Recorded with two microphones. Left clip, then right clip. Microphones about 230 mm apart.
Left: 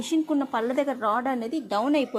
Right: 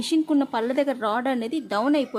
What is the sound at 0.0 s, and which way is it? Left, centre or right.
A woman's voice, right.